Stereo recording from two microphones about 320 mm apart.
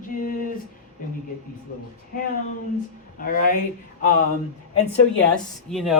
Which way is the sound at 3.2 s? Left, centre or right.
Left.